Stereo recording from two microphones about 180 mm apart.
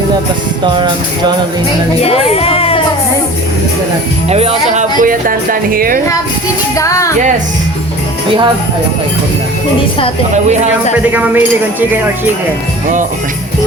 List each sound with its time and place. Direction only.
0.6 s music: 25° right (ahead or behind)
2.0 s speech: 35° left (ahead or behind)
4.3 s speech: 35° right (ahead or behind); by 6.0 s 50° right (ahead or behind)
6.7 s speech: 15° left (ahead or behind)
11.1 s speech: 10° right (ahead or behind)